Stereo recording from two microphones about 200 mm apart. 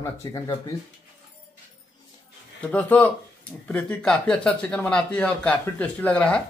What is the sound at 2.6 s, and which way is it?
Speech, 5° left (ahead or behind).